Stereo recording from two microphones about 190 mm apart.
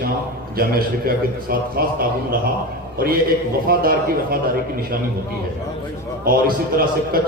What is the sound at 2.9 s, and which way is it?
A man's voice, 50° right (ahead or behind).